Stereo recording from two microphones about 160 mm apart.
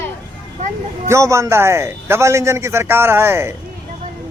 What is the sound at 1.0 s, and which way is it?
Speech, 20° right (ahead or behind).